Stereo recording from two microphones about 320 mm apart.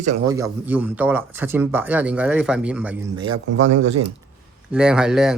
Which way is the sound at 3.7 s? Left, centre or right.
Right.